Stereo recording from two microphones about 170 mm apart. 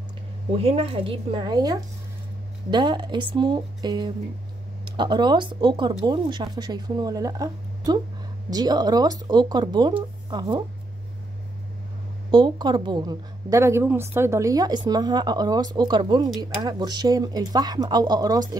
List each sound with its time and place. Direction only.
0.6 s a woman's voice: 35° right (ahead or behind)
12.3 s speech: 25° right (ahead or behind)